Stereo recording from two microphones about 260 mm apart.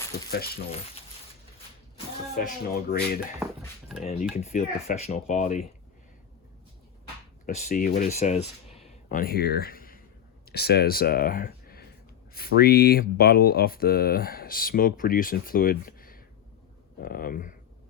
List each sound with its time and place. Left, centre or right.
0.3 s speech: left
2.3 s speech: left
3.4 s a sound: centre
4.0 s speech: left
7.4 s speech: left